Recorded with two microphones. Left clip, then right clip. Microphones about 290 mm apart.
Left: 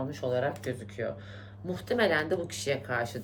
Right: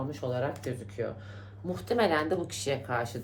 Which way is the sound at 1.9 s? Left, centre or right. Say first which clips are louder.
Even; centre.